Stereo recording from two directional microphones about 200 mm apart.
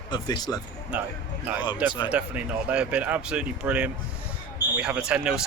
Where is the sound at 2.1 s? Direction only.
5° right (ahead or behind).